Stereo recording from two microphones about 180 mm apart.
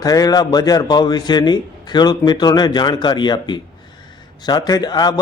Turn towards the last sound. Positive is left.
turn(degrees=25)  # may be behind; listen again after turning